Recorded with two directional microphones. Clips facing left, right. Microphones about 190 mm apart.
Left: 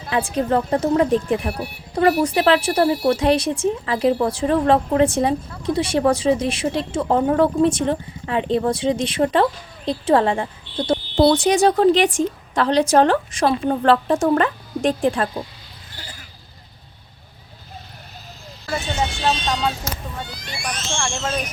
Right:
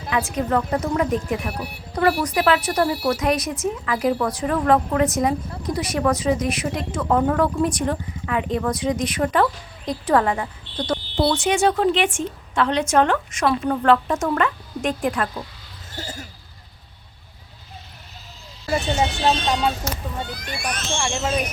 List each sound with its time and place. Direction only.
0.1 s a woman's voice: 30° left (ahead or behind)
11.2 s a woman's voice: 40° left (ahead or behind)
16.0 s bleat: 45° right (ahead or behind)
19.2 s speech: 5° right (ahead or behind)
20.3 s speech: 55° right (ahead or behind)